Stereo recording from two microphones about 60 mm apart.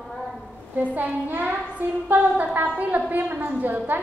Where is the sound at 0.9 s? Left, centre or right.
Right.